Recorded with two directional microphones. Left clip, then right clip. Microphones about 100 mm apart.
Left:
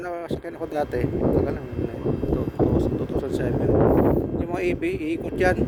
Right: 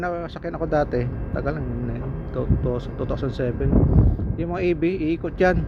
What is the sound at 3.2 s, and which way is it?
A man's voice, 30° left (ahead or behind).